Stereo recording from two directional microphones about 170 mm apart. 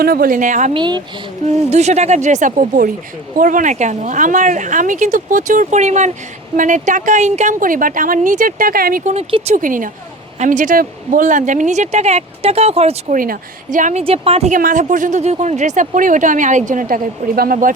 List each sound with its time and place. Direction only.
0.0 s speech: 60° right (ahead or behind)
0.7 s speech: 25° right (ahead or behind)
1.5 s speech: 40° right (ahead or behind)
9.1 s speech: 40° right (ahead or behind)
9.6 s speech: 50° right (ahead or behind)
13.1 s speech: 55° right (ahead or behind)
14.0 s speech: 35° right (ahead or behind); by 17.7 s 55° right (ahead or behind)